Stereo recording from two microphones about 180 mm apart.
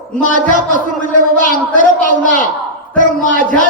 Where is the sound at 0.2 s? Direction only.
45° left (ahead or behind).